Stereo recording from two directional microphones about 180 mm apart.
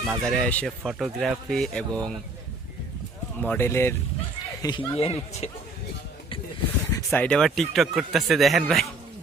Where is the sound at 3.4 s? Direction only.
10° left (ahead or behind).